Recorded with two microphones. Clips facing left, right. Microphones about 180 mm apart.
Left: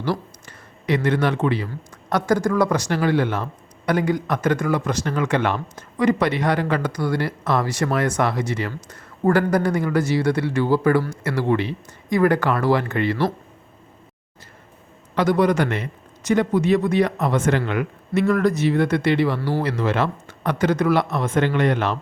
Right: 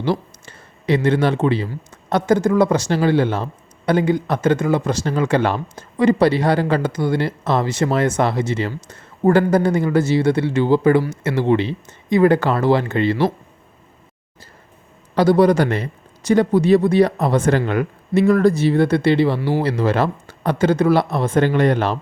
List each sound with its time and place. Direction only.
0.0 s speech: 25° right (ahead or behind)
15.1 s a man's voice: 35° right (ahead or behind)